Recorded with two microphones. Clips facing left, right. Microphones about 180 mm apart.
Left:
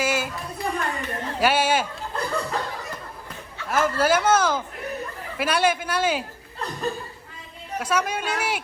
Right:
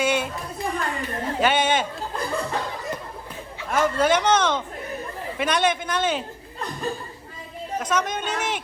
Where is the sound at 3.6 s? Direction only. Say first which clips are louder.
Right 1 dB; 5° left (ahead or behind).